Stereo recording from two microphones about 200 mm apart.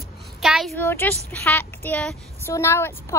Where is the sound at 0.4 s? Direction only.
Centre (ahead or behind).